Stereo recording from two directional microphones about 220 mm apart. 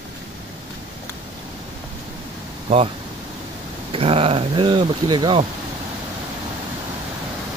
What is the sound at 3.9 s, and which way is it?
Speech, 25° right (ahead or behind).